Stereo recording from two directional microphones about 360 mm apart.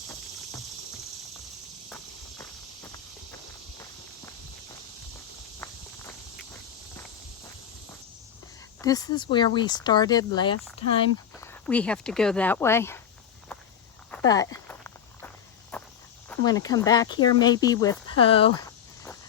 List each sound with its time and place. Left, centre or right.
6.1 s walk: centre
8.8 s speech: centre
11.6 s speech: centre
14.1 s walk: centre
16.4 s speech: centre
18.2 s a sound: centre